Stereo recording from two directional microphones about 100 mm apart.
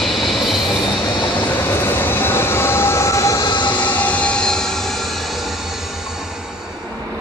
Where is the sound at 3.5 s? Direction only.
50° left (ahead or behind).